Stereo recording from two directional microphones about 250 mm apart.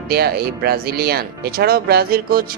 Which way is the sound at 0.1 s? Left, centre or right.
Right.